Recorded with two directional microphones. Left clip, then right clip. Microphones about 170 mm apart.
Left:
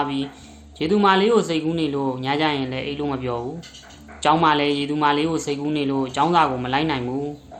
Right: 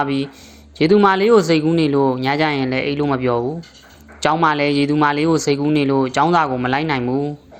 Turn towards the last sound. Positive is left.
turn(degrees=-45)  # may be behind; listen again after turning